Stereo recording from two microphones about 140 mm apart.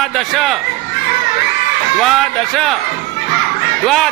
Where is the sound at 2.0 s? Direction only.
Centre (ahead or behind).